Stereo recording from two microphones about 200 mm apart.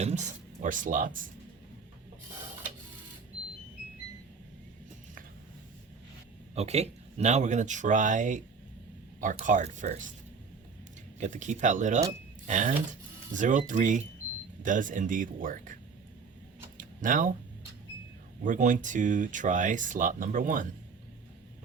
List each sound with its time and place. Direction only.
0.0 s speech: 35° right (ahead or behind)
6.5 s speech: 30° right (ahead or behind)
11.2 s speech: 40° right (ahead or behind)
16.7 s a sound: 40° right (ahead or behind)
18.4 s speech: 40° right (ahead or behind)